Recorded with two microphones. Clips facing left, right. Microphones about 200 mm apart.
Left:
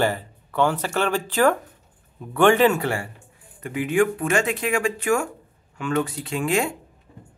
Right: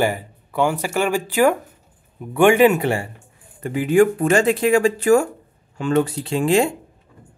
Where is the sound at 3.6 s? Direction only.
35° right (ahead or behind).